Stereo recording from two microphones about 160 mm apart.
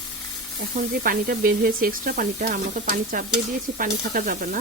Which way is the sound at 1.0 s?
65° right (ahead or behind).